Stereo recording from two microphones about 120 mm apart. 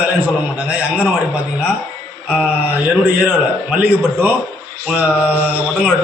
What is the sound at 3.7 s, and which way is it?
A man's voice, 15° right (ahead or behind).